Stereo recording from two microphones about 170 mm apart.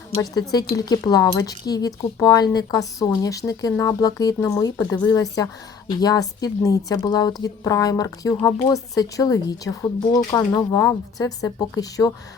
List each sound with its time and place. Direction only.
0.2 s speech: 25° left (ahead or behind)